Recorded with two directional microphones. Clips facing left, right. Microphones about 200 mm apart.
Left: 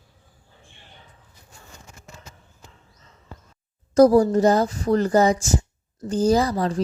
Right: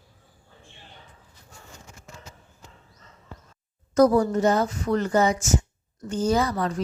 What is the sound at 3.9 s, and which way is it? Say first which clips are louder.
A woman's voice: left 4 dB; 30° left (ahead or behind).